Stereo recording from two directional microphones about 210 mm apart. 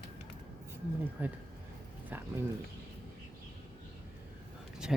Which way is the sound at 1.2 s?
5° right (ahead or behind).